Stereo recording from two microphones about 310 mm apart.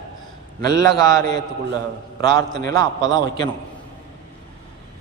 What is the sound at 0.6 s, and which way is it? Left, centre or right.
A man's voice, centre.